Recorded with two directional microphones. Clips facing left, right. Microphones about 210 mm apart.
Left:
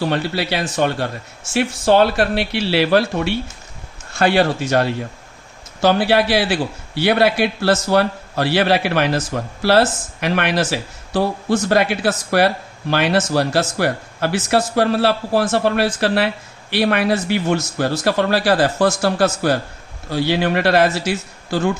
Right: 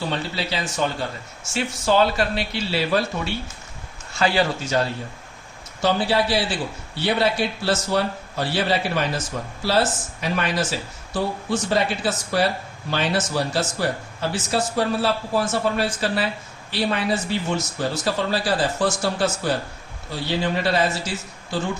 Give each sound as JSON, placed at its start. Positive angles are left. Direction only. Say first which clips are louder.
{"t": 0.1, "sound": "speech", "louder": "left 6 dB", "side_deg": 70}
{"t": 5.8, "sound": "a man's voice", "louder": "left 5 dB", "side_deg": 90}